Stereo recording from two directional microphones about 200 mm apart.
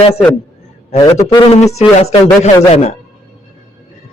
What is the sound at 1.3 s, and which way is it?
Speech, 20° left (ahead or behind).